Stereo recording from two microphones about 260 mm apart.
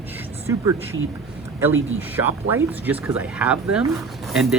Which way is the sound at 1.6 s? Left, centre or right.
Centre.